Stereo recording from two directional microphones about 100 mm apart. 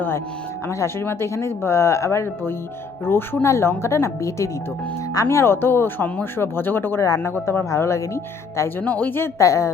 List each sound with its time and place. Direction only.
0.7 s speech: 25° left (ahead or behind)
8.8 s speech: 15° left (ahead or behind)